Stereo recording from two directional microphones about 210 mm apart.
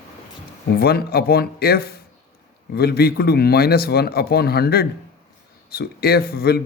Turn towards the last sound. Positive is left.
turn(degrees=50)  # may be behind; listen again after turning